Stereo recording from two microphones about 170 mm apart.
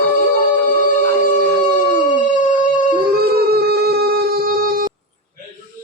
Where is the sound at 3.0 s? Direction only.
65° right (ahead or behind).